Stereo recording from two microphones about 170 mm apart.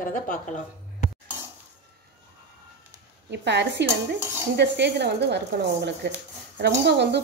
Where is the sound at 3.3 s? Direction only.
90° right.